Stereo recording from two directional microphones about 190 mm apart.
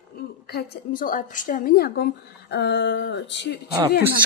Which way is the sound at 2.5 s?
65° left (ahead or behind).